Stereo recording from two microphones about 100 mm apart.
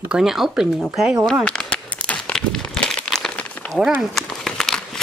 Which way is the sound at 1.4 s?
10° left (ahead or behind).